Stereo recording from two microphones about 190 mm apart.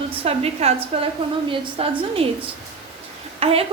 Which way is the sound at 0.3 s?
30° right (ahead or behind).